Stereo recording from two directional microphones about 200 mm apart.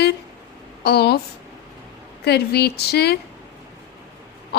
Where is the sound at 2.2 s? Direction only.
55° left (ahead or behind).